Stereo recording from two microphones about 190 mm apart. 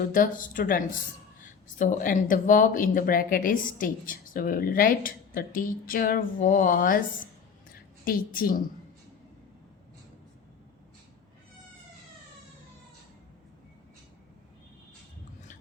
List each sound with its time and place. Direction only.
0.1 s speech: 45° left (ahead or behind)